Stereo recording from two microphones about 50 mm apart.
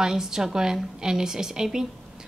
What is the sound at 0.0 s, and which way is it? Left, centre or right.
Speech, centre.